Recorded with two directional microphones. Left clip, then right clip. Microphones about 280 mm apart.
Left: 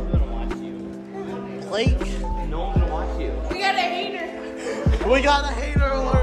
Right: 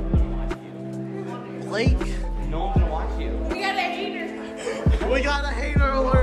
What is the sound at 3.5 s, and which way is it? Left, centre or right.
Speech, left.